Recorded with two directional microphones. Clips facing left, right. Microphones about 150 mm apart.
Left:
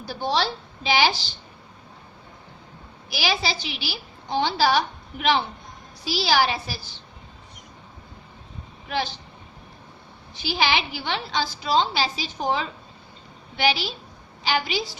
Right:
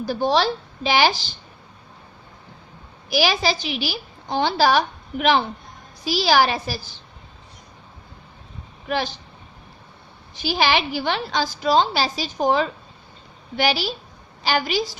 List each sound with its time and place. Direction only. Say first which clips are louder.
0.0 s a woman's voice: right 5 dB; 50° right (ahead or behind)
3.1 s a woman's voice: right 6 dB; 45° right (ahead or behind)
10.3 s a woman's voice: right 3 dB; 45° right (ahead or behind)